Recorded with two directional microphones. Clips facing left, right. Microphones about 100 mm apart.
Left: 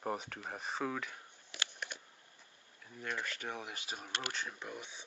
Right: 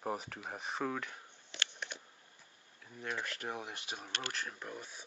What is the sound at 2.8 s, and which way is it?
Speech, 5° right (ahead or behind).